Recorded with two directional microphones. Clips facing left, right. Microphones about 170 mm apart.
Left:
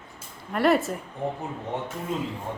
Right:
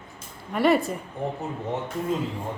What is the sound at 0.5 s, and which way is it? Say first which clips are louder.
Speech: right 1 dB; centre (ahead or behind).